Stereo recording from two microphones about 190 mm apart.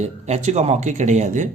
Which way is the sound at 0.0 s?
35° right (ahead or behind).